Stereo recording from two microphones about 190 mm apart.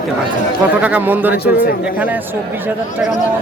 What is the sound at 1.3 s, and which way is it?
Speech, 55° left (ahead or behind).